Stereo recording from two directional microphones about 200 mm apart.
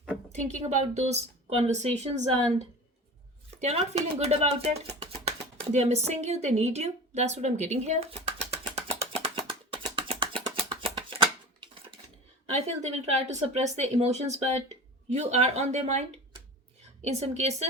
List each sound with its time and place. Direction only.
0.3 s speech: 35° right (ahead or behind)
3.6 s speech: 30° right (ahead or behind)
8.7 s a sound: 30° right (ahead or behind)
10.4 s music: 25° right (ahead or behind)
10.9 s a sound: 25° right (ahead or behind)
12.5 s speech: 30° right (ahead or behind)